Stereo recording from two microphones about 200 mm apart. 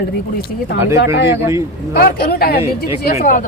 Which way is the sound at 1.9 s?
50° left (ahead or behind).